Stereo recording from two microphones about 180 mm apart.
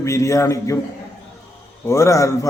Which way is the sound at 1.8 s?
15° left (ahead or behind).